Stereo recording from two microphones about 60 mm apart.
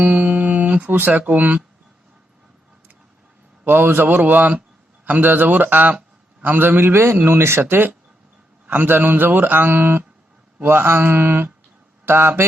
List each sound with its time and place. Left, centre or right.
0.0 s music: right
0.9 s speech: right
3.7 s a man's voice: right